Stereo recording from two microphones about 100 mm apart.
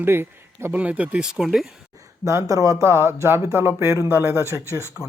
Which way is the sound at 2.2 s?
30° right (ahead or behind).